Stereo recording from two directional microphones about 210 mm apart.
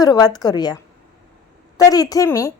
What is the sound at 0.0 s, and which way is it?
Speech, 20° left (ahead or behind).